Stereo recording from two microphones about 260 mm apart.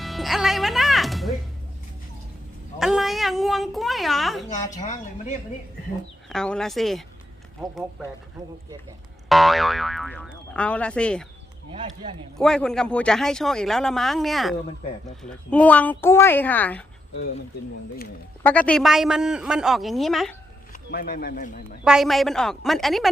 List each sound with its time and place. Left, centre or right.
0.0 s music: centre
2.7 s a woman's voice: centre
4.9 s speech: left
6.2 s speech: centre
8.4 s speech: centre
9.3 s speech: centre
12.4 s speech: centre
18.4 s speech: centre
20.9 s a man's voice: left
21.8 s speech: centre